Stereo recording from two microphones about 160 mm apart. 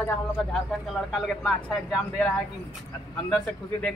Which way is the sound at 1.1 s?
Centre (ahead or behind).